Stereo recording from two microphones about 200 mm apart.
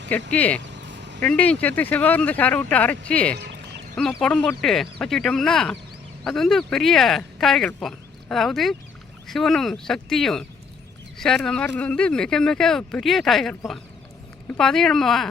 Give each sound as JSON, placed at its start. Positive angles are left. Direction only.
{"t": 0.1, "sound": "speech", "side_deg": 5}
{"t": 0.6, "sound": "vehicle", "side_deg": -60}
{"t": 1.2, "sound": "speech", "side_deg": 5}
{"t": 3.3, "sound": "music", "side_deg": -55}
{"t": 3.9, "sound": "speech", "side_deg": 5}